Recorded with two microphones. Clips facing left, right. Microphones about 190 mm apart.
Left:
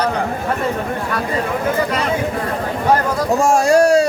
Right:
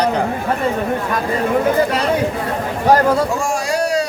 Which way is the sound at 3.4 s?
45° left (ahead or behind).